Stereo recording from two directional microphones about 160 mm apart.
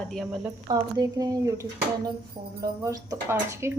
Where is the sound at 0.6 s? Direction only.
25° right (ahead or behind).